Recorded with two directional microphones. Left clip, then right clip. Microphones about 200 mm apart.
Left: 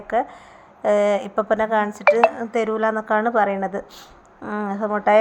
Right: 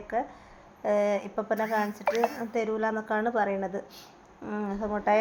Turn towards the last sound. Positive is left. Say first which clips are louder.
# left 9 dB
turn(degrees=25)  # may be behind; listen again after turning